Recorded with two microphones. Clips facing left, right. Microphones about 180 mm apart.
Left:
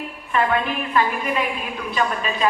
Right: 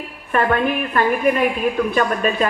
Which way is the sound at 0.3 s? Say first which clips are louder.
Right 3 dB; 50° right (ahead or behind).